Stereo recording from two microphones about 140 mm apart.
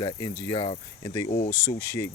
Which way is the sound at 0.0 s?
35° left (ahead or behind).